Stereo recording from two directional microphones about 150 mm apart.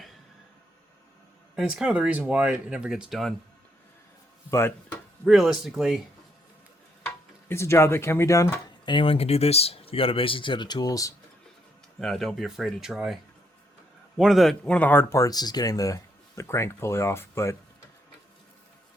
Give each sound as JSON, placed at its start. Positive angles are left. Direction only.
{"t": 1.5, "sound": "speech", "side_deg": -5}
{"t": 5.2, "sound": "speech", "side_deg": 0}
{"t": 7.4, "sound": "speech", "side_deg": 15}
{"t": 8.8, "sound": "speech", "side_deg": 35}
{"t": 11.9, "sound": "speech", "side_deg": 0}
{"t": 14.2, "sound": "speech", "side_deg": 0}